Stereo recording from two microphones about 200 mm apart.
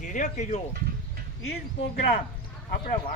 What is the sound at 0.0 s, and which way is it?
Speech, 40° left (ahead or behind).